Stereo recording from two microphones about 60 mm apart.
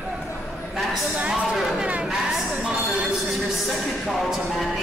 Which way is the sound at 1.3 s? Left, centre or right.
Centre.